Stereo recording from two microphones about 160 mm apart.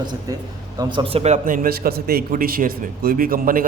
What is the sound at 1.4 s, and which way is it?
A man's voice, 60° right (ahead or behind).